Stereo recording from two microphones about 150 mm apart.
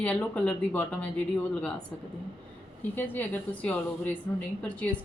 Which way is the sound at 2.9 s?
15° left (ahead or behind).